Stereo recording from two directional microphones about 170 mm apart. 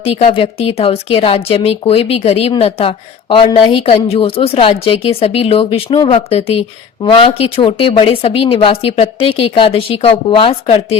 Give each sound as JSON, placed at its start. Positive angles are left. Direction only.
{"t": 0.0, "sound": "speech", "side_deg": 35}